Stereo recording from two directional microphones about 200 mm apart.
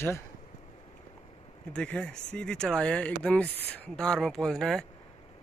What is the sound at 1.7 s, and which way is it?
Speech, 5° left (ahead or behind).